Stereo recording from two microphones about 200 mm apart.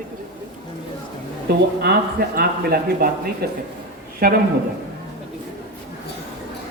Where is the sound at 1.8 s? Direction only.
50° right (ahead or behind).